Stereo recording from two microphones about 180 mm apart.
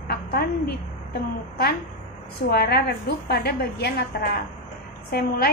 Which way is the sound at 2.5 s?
60° left (ahead or behind).